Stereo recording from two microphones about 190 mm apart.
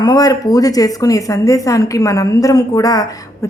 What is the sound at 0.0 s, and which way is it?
A woman's voice, 20° left (ahead or behind).